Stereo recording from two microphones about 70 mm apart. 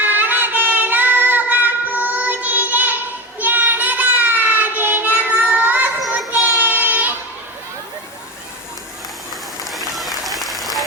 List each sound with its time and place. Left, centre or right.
0.0 s child singing: right
9.7 s applause: centre